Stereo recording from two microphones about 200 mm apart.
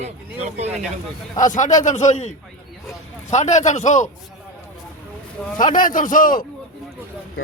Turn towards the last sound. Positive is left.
turn(degrees=40)  # may be behind; listen again after turning